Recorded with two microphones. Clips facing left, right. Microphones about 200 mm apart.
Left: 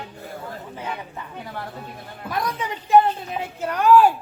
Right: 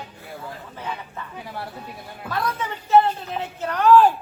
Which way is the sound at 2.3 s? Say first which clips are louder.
Even; 15° left (ahead or behind).